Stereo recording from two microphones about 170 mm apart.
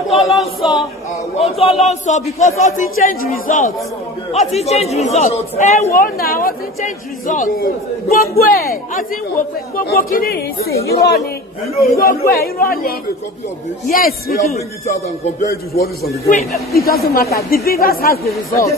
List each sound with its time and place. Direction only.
0.1 s choir: centre (ahead or behind)
1.4 s a man's voice: 35° left (ahead or behind)
5.9 s a man's voice: 60° left (ahead or behind)
6.8 s a man's voice: 50° left (ahead or behind)
15.5 s a man's voice: 65° left (ahead or behind)
18.5 s speech: 15° left (ahead or behind)